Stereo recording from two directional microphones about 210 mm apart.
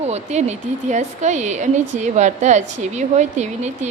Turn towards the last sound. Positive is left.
turn(degrees=-35)  # may be behind; listen again after turning